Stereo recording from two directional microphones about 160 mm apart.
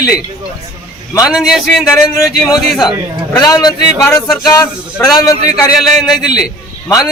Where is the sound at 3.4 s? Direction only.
25° left (ahead or behind).